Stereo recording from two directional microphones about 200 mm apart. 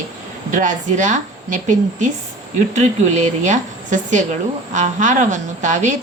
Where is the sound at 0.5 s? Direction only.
40° right (ahead or behind).